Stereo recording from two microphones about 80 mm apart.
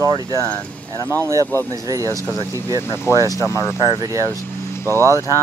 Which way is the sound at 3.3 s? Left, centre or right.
Left.